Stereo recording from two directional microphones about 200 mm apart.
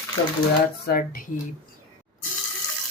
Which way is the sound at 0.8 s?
50° left (ahead or behind).